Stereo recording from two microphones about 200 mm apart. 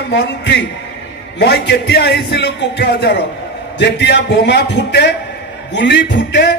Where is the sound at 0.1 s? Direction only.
60° left (ahead or behind).